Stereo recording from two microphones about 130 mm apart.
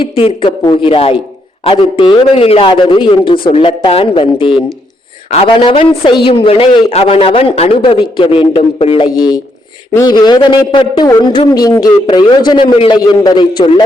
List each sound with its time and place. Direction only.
0.4 s a man's voice: 40° left (ahead or behind)
9.9 s a man's voice: 30° left (ahead or behind)